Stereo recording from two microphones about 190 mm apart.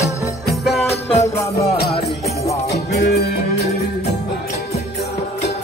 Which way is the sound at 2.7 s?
60° left (ahead or behind).